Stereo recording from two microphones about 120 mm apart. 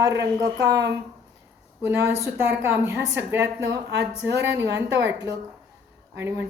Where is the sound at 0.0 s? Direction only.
30° right (ahead or behind).